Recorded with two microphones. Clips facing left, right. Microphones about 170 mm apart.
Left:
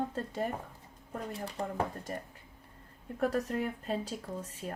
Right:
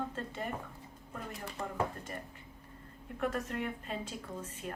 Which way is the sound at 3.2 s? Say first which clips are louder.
Left 4 dB; 35° left (ahead or behind).